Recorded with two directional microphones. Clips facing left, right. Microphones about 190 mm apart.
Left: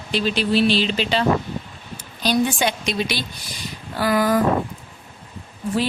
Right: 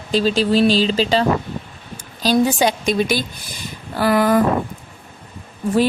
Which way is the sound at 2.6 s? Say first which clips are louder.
Right 5 dB; 45° right (ahead or behind).